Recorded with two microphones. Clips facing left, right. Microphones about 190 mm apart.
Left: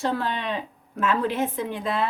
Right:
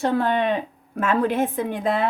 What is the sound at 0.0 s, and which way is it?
A woman's voice, 55° right (ahead or behind).